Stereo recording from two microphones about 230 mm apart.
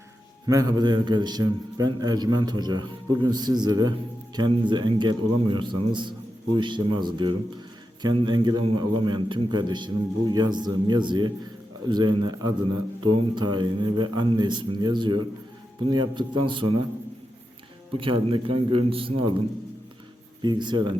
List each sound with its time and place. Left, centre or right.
0.4 s a man's voice: centre
17.9 s a man's voice: right
20.4 s a man's voice: centre